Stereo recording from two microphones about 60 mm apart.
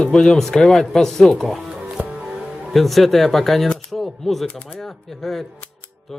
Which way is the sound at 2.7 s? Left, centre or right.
Centre.